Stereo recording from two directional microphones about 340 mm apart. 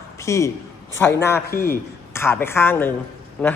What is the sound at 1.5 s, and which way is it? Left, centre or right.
Speech, left.